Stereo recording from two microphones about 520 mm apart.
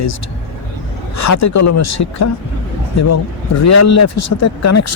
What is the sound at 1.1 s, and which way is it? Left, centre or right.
Speech, left.